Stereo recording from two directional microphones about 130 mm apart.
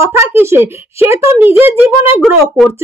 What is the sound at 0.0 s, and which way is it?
A child's voice, 20° right (ahead or behind).